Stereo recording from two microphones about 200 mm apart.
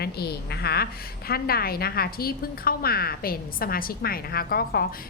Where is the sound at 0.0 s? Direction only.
55° left (ahead or behind).